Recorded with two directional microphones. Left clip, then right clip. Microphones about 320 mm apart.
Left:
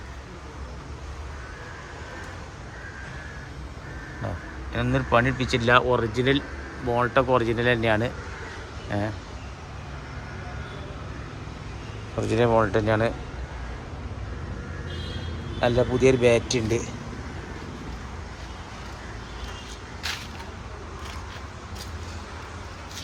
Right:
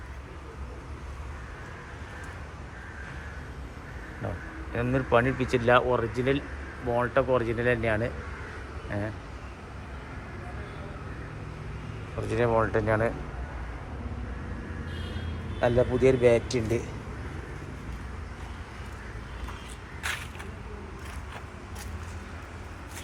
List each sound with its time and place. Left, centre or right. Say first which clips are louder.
4.7 s speech: left 2 dB; centre
12.3 s speech: left 4 dB; centre
15.6 s speech: left 2 dB; centre